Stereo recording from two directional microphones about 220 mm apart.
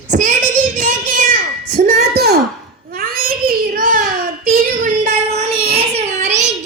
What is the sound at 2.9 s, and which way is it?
Child singing, 40° right (ahead or behind).